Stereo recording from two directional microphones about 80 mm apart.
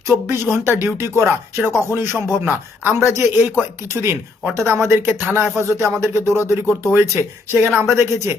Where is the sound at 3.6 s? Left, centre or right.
Right.